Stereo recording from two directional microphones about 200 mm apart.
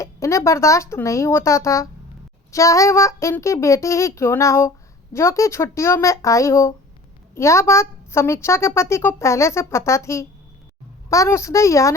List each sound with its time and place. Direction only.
0.0 s a woman's voice: 15° left (ahead or behind)